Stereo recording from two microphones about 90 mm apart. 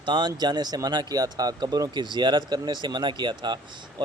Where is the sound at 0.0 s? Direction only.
55° right (ahead or behind).